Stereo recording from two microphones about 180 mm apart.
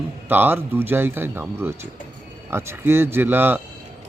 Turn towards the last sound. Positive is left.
turn(degrees=-10)  # may be behind; listen again after turning